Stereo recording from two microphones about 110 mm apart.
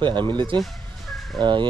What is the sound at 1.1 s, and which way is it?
Fowl, centre (ahead or behind).